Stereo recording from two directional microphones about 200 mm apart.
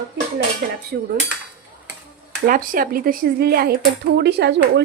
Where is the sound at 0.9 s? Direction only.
55° right (ahead or behind).